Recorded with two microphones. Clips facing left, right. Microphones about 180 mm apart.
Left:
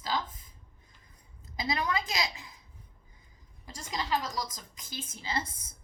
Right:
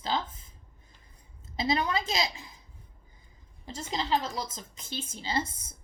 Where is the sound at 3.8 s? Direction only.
25° right (ahead or behind).